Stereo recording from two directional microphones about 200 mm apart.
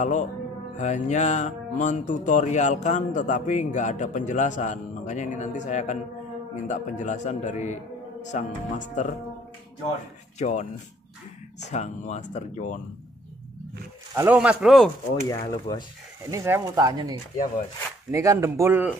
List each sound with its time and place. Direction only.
0.0 s speech: 35° left (ahead or behind)
10.4 s speech: 35° left (ahead or behind)
11.7 s speech: 35° left (ahead or behind)
14.1 s speech: 10° right (ahead or behind)
15.2 s speech: 20° left (ahead or behind)
16.3 s speech: 15° right (ahead or behind)
18.1 s speech: 15° right (ahead or behind)